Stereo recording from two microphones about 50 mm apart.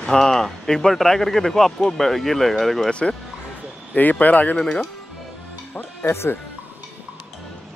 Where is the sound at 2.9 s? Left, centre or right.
Left.